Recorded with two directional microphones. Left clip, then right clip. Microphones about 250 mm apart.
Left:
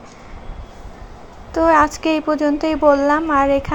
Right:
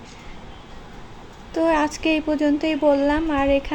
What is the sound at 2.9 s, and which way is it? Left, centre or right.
Speech, centre.